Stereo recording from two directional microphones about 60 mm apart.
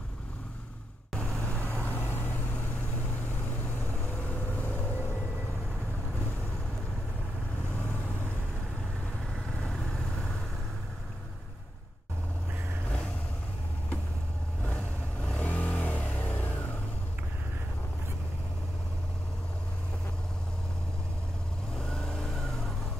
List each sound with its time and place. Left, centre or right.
1.1 s vehicle: centre
1.6 s vehicle: left
3.8 s vehicle: left
14.6 s vehicle: left
21.7 s vehicle: centre